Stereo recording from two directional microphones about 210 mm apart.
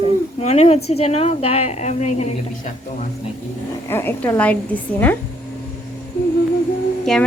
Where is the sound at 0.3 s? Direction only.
30° left (ahead or behind).